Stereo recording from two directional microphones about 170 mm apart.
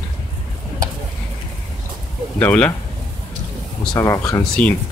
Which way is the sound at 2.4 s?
5° left (ahead or behind).